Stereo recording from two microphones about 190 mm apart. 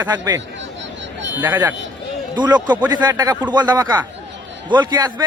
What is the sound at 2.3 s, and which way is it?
A man's voice, 20° right (ahead or behind).